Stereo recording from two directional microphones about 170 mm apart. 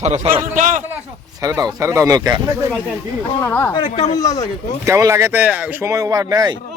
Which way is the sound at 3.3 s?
15° left (ahead or behind).